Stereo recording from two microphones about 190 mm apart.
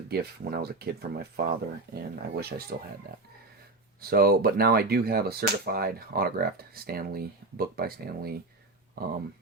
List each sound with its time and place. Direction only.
0.1 s speech: 55° right (ahead or behind)
4.0 s speech: 50° right (ahead or behind)